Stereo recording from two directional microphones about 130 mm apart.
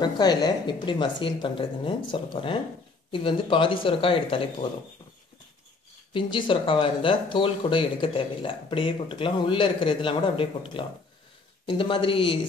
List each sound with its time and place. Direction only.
0.0 s speech: 30° left (ahead or behind)
6.1 s speech: 40° left (ahead or behind)